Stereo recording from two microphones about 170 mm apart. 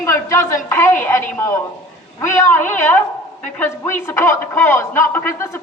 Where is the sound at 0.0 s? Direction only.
15° left (ahead or behind).